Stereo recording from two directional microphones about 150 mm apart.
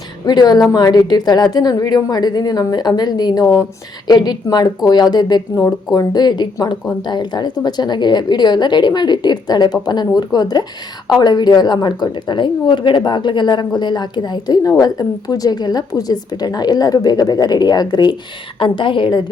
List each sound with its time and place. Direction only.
0.3 s a woman's voice: 25° left (ahead or behind)